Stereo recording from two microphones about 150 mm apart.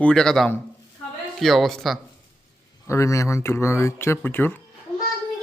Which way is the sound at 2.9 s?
20° left (ahead or behind).